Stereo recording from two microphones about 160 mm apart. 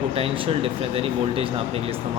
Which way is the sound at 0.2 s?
35° right (ahead or behind).